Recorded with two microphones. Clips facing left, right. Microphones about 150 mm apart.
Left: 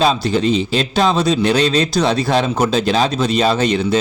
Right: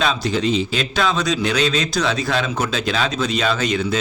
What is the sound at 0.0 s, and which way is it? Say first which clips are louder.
Speech: left 5 dB; 35° left (ahead or behind).